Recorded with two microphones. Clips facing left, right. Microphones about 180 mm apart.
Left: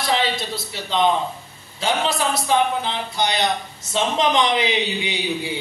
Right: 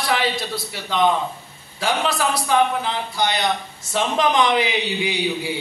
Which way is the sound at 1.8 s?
20° left (ahead or behind).